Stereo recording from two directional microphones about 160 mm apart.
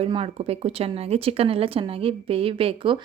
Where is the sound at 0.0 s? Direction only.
35° right (ahead or behind).